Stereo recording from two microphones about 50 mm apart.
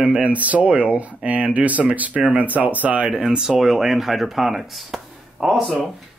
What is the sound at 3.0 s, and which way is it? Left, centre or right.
Speech, centre.